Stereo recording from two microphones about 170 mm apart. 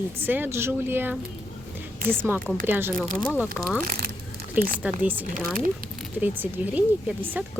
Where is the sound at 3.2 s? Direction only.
10° left (ahead or behind).